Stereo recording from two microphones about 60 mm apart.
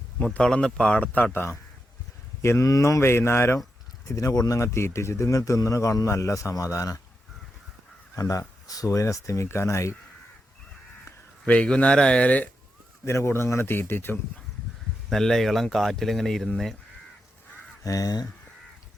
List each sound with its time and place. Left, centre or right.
0.3 s speech: centre; by 2.6 s left
2.6 s speech: left
3.0 s speech: left
4.1 s speech: left
8.1 s speech: left
8.9 s speech: left
11.4 s speech: centre
13.1 s speech: left
15.1 s speech: centre
17.8 s speech: left